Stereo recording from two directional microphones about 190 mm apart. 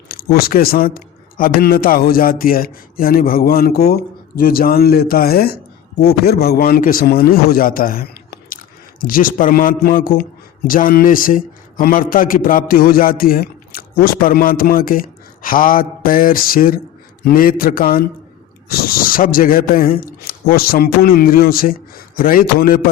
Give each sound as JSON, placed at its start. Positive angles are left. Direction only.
{"t": 0.1, "sound": "a man's voice", "side_deg": 50}